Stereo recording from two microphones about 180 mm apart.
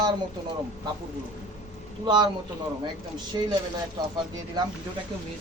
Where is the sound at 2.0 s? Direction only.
25° right (ahead or behind).